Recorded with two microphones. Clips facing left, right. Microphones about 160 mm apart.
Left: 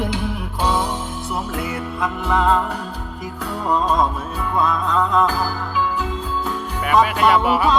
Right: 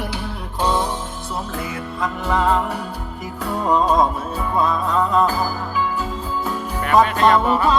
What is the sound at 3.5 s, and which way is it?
Music, 10° right (ahead or behind).